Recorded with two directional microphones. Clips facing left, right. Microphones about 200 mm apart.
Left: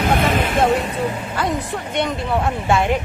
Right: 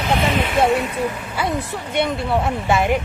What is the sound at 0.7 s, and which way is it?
Speech, 30° left (ahead or behind).